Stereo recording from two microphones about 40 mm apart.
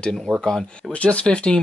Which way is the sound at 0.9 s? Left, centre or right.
Left.